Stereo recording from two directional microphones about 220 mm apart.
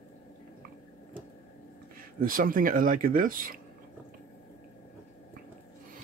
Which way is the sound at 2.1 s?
40° right (ahead or behind).